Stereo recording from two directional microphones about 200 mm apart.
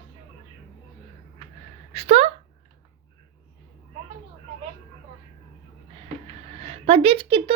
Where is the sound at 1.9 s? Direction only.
30° right (ahead or behind).